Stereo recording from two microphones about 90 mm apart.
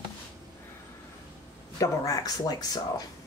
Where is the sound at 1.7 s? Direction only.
40° left (ahead or behind).